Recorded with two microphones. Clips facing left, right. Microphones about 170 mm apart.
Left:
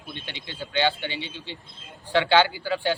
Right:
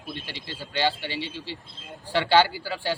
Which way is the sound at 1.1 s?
35° right (ahead or behind).